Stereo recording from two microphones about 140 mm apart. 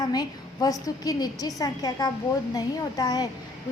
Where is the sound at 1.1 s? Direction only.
25° left (ahead or behind).